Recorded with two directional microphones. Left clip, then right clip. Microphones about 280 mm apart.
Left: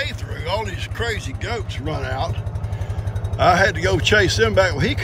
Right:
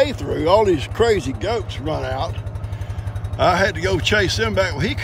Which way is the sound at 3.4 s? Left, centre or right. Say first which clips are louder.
Left 1 dB; centre.